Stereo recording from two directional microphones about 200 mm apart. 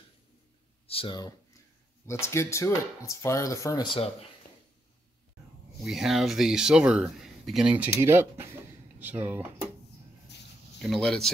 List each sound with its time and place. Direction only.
0.8 s speech: 25° left (ahead or behind)
5.9 s speech: centre (ahead or behind)
10.8 s speech: centre (ahead or behind)